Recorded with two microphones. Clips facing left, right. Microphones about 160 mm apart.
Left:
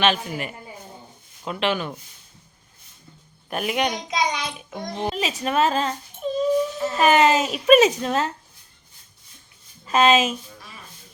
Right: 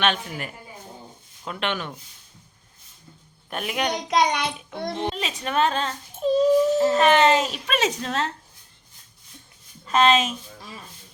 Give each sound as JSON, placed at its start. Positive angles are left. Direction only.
{"t": 0.0, "sound": "a woman's voice", "side_deg": 0}
{"t": 3.5, "sound": "a woman's voice", "side_deg": 0}
{"t": 4.1, "sound": "a child's voice", "side_deg": -65}
{"t": 5.0, "sound": "a woman's voice", "side_deg": 5}
{"t": 6.2, "sound": "dog", "side_deg": -40}
{"t": 6.9, "sound": "a woman's voice", "side_deg": 5}
{"t": 9.8, "sound": "speech", "side_deg": 5}